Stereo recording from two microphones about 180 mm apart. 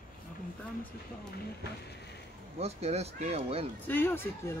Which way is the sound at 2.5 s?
35° right (ahead or behind).